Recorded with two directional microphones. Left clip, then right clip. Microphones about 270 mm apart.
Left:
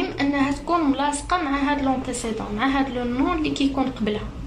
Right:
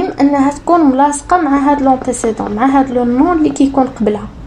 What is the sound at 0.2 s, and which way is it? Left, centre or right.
A woman's voice, right.